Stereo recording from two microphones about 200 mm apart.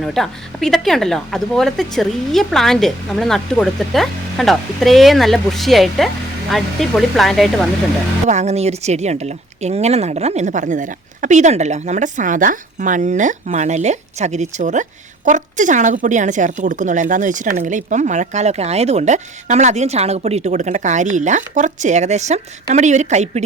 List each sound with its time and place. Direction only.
0.0 s speech: centre (ahead or behind)
8.3 s speech: 35° right (ahead or behind)